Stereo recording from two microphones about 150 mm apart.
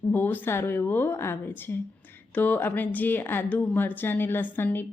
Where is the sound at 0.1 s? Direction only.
10° left (ahead or behind).